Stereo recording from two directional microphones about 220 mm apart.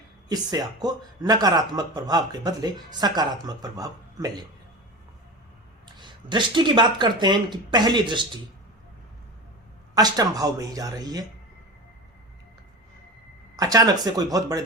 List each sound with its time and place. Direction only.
0.3 s speech: 15° right (ahead or behind)
6.0 s speech: 20° right (ahead or behind)
9.9 s speech: 15° right (ahead or behind)
13.6 s speech: 15° right (ahead or behind)